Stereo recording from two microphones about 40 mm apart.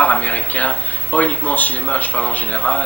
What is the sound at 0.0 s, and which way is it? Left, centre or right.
Speech, left.